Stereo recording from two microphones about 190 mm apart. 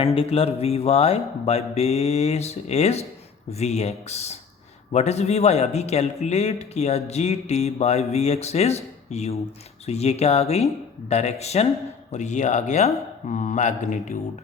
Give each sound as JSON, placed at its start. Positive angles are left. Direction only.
{"t": 0.0, "sound": "speech", "side_deg": 30}